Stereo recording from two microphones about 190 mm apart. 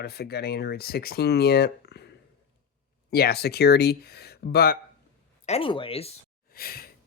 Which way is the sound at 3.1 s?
55° left (ahead or behind).